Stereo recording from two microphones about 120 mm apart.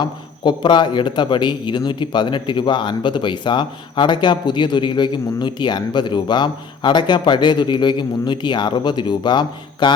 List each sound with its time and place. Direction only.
0.0 s a man's voice: 40° left (ahead or behind)